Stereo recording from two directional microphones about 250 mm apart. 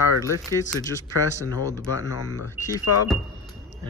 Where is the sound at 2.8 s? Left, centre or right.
Left.